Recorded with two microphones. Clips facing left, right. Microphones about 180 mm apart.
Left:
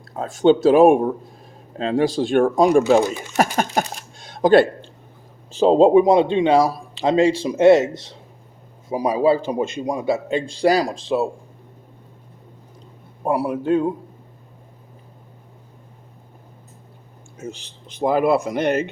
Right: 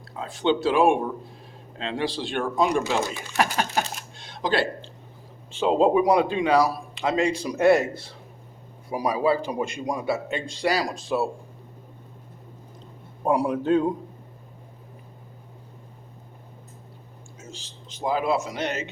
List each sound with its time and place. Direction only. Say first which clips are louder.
0.2 s speech: left 8 dB; 45° left (ahead or behind)
5.5 s a man's voice: left 7 dB; 35° left (ahead or behind)
8.9 s a man's voice: left 5 dB; 25° left (ahead or behind)
13.2 s a man's voice: left 1 dB; 10° left (ahead or behind)
17.3 s speech: left 10 dB; 60° left (ahead or behind)